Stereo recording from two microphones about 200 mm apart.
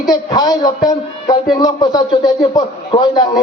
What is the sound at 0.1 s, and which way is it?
A man's voice, 20° left (ahead or behind).